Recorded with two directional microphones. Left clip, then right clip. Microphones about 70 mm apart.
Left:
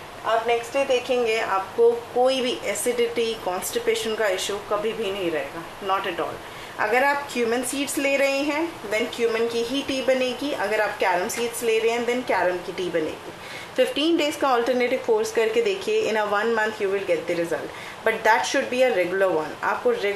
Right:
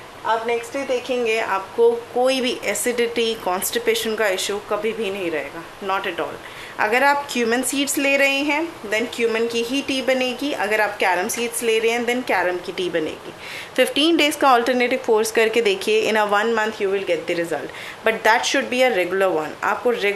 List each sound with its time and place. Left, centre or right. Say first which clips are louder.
0.3 s a woman's voice: right 1 dB; right
6.8 s a woman's voice: right 4 dB; right